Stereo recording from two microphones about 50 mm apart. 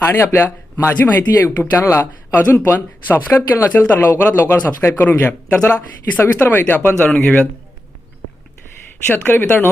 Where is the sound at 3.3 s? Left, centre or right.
Left.